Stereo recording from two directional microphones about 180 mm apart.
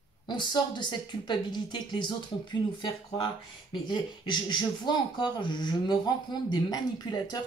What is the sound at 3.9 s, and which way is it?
Speech, 25° left (ahead or behind).